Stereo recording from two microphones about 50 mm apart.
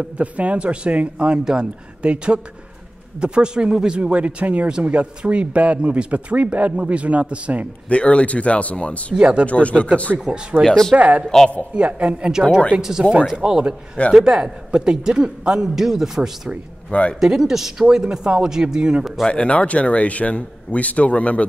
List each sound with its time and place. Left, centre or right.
0.0 s speech: right
7.9 s a man's voice: left
9.1 s speech: right
9.5 s a man's voice: left
10.3 s speech: right
10.6 s speech: centre
11.0 s speech: right
11.2 s speech: centre
11.7 s a man's voice: right
16.9 s a man's voice: left
17.2 s a man's voice: centre
19.2 s a man's voice: left